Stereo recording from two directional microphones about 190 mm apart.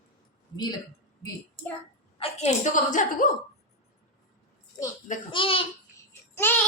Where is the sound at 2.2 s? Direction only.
35° left (ahead or behind).